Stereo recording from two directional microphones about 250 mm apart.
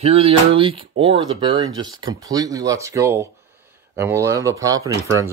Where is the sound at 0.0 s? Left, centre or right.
Right.